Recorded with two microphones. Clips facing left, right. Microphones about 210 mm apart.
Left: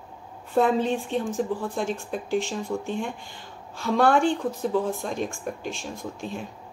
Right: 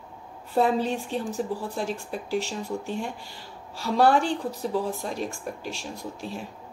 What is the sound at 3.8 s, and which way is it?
Speech, 5° right (ahead or behind).